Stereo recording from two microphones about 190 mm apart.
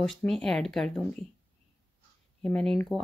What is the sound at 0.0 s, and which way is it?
Speech, centre (ahead or behind).